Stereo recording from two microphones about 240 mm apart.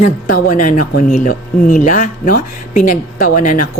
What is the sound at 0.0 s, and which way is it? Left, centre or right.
Speech, left.